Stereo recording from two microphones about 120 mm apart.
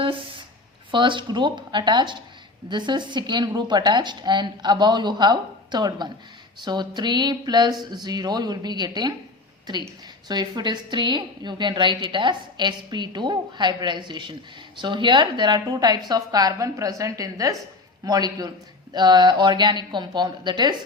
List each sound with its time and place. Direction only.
0.0 s a sound: 45° right (ahead or behind)
0.9 s a woman's voice: 45° right (ahead or behind)
10.2 s a woman's voice: 35° right (ahead or behind)